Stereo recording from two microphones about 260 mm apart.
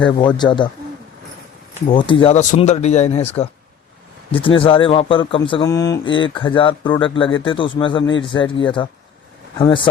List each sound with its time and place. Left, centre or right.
0.0 s speech: centre
2.0 s speech: centre
4.3 s speech: centre